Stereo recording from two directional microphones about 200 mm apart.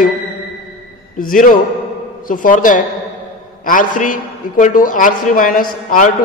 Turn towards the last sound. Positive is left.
turn(degrees=45)  # may be behind; listen again after turning